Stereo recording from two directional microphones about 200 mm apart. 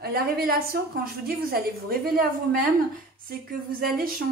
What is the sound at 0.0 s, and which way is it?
A woman's voice, 50° right (ahead or behind).